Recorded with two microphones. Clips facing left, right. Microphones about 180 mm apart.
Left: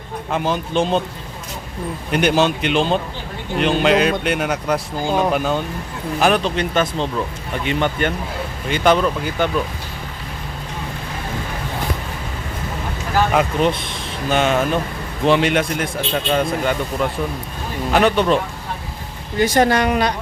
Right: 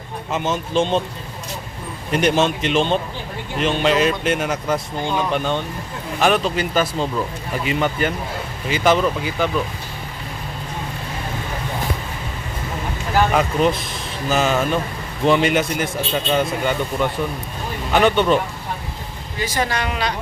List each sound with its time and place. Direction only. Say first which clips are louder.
0.5 s speech: right 1 dB; centre (ahead or behind)
2.1 s speech: left 1 dB; centre (ahead or behind)
13.3 s speech: even; centre (ahead or behind)
19.4 s speech: left 8 dB; 55° left (ahead or behind)